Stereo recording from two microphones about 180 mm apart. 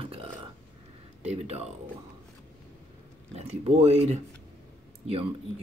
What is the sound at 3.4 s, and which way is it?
Speech, 35° right (ahead or behind).